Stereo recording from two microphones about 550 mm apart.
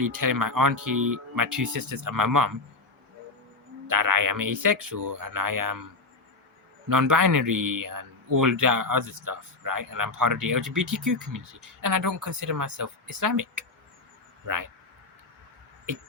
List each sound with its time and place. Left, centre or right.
0.0 s speech: right
3.8 s speech: right
6.8 s speech: right